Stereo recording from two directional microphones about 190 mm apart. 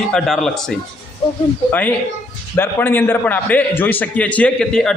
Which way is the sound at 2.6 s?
10° left (ahead or behind).